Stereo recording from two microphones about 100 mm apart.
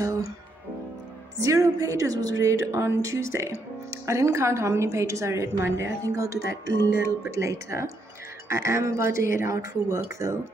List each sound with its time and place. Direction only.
0.0 s music: 30° right (ahead or behind)
1.4 s a woman's voice: 35° right (ahead or behind)